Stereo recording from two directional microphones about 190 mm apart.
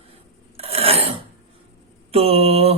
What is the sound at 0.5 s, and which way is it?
Filing, 30° right (ahead or behind).